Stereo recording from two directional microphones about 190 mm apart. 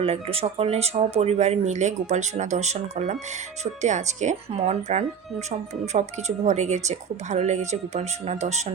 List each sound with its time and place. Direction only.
0.0 s speech: 30° right (ahead or behind)